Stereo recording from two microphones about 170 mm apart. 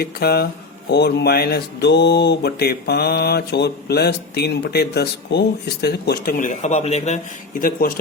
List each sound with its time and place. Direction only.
0.0 s speech: 65° left (ahead or behind); by 7.2 s 40° left (ahead or behind)
7.6 s speech: 60° left (ahead or behind)